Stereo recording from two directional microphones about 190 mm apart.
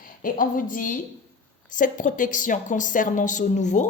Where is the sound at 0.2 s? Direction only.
45° left (ahead or behind).